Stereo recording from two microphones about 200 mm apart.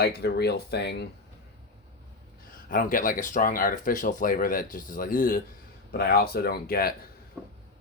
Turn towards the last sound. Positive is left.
turn(degrees=50)  # may be behind; listen again after turning